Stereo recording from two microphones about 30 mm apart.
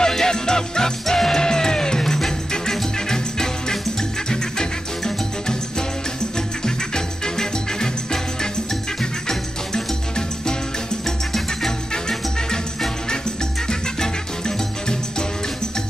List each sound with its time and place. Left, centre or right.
0.0 s music: left
7.2 s music: left
13.7 s music: left